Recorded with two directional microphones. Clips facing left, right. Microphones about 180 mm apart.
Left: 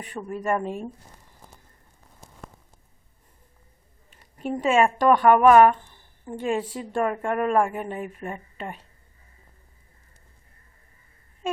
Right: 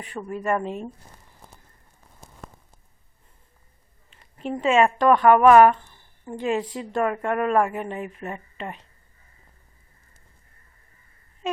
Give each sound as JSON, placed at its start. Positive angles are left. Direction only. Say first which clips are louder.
{"t": 0.2, "sound": "a woman's voice", "louder": "right 1 dB", "side_deg": 5}
{"t": 4.4, "sound": "a woman's voice", "louder": "right 1 dB", "side_deg": 5}